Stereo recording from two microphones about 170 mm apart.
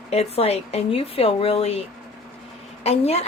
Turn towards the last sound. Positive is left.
turn(degrees=40)  # may be behind; listen again after turning